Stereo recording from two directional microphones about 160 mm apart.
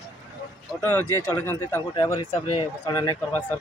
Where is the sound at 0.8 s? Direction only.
10° left (ahead or behind).